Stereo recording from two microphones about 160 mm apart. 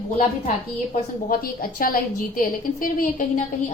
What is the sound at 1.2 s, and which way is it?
Speech, 65° left (ahead or behind).